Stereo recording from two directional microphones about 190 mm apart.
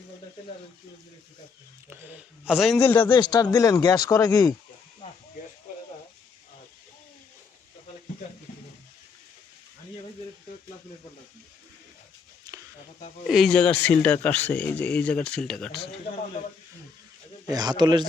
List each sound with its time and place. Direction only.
1.9 s a man's voice: 10° right (ahead or behind)
2.9 s speech: 25° left (ahead or behind)
12.5 s a sound: 20° right (ahead or behind)
13.2 s speech: centre (ahead or behind)
17.5 s a man's voice: 20° right (ahead or behind)